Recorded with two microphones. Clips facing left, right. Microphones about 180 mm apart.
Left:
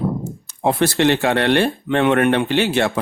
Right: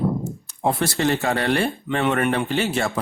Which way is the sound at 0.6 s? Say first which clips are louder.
Left 5 dB; 80° left.